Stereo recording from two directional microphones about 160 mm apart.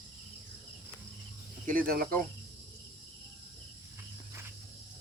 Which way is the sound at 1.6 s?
60° right (ahead or behind).